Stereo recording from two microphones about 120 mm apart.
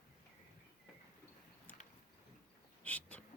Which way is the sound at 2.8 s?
15° left (ahead or behind).